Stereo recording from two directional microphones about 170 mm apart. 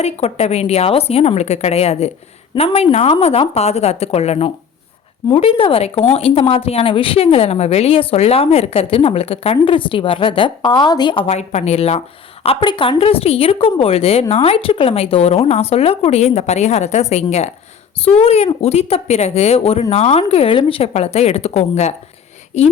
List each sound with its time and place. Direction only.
0.0 s a woman's voice: 40° left (ahead or behind)